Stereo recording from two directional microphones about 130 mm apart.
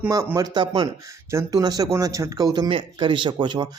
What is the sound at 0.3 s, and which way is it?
A man's voice, 30° right (ahead or behind).